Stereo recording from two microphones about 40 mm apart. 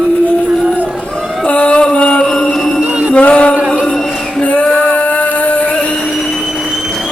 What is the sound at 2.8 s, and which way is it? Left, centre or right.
Music, right.